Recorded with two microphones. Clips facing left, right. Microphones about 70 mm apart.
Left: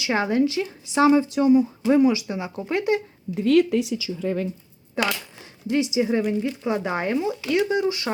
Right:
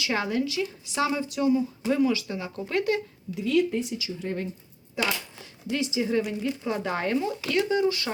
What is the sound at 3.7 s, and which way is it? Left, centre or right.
Speech, left.